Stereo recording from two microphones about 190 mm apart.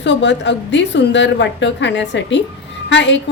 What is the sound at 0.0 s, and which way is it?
A woman's voice, 70° left (ahead or behind).